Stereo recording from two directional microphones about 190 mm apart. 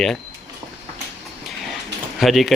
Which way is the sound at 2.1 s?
Centre (ahead or behind).